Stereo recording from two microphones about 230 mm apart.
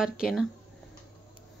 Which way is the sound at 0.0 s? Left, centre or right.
Centre.